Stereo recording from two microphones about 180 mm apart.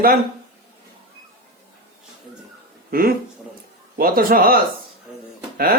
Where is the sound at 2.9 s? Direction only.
55° right (ahead or behind).